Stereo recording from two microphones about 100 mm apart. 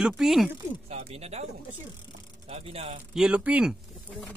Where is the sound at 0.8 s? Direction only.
90° right.